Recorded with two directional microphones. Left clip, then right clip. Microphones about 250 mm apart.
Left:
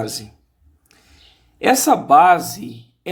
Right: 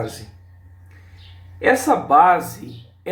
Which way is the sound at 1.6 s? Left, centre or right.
Left.